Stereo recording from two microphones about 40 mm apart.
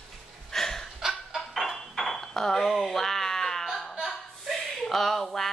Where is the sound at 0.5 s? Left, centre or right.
Centre.